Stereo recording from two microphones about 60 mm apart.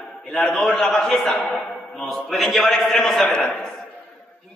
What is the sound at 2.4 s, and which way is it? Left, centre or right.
Speech, centre.